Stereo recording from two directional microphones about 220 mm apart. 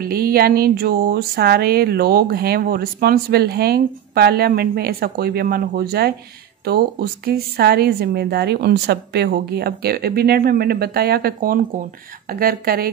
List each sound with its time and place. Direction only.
0.0 s speech: 45° right (ahead or behind)